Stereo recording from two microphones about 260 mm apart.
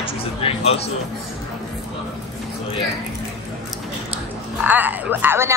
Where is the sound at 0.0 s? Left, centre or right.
Left.